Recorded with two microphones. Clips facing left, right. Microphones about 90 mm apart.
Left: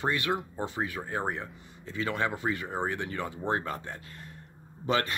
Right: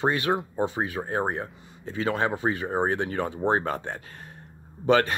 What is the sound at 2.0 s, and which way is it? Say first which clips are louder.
Speech: right 5 dB; 30° right (ahead or behind).